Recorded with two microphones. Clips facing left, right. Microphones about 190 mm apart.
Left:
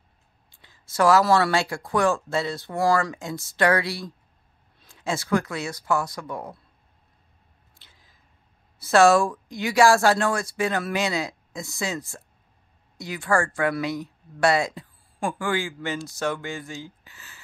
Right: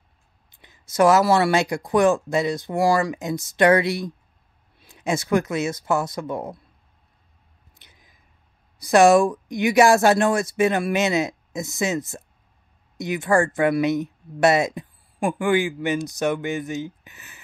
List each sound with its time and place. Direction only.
0.5 s speech: 20° right (ahead or behind)
7.7 s a sound: 20° right (ahead or behind)
8.7 s speech: 15° right (ahead or behind)